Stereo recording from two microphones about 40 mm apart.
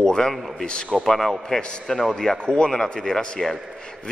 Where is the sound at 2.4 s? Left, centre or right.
Left.